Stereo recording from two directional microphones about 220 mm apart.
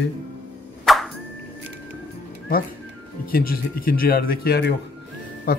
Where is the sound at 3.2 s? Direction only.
40° left (ahead or behind).